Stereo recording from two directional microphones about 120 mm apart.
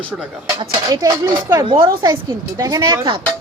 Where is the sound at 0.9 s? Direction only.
30° right (ahead or behind).